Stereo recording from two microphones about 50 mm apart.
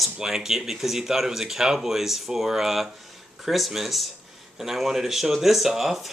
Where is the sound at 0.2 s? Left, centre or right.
Centre.